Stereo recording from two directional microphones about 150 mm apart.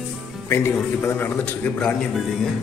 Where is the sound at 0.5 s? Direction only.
15° left (ahead or behind).